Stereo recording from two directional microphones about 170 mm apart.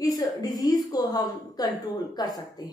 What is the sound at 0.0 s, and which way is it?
A woman's voice, 20° left (ahead or behind).